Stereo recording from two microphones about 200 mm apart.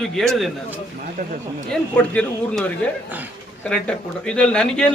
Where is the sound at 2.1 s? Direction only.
5° left (ahead or behind).